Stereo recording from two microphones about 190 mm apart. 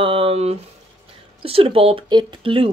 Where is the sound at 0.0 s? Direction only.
30° right (ahead or behind).